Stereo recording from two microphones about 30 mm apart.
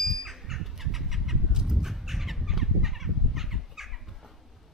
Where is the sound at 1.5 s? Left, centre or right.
Centre.